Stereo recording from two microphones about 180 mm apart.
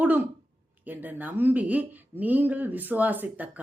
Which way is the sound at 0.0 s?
10° right (ahead or behind).